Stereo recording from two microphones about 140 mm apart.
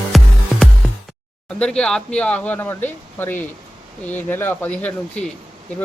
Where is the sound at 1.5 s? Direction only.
5° left (ahead or behind).